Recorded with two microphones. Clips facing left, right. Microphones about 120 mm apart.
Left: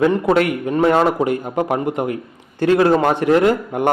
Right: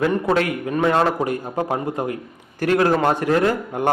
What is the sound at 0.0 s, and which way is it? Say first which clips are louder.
A man's voice: left 4 dB; 25° left (ahead or behind).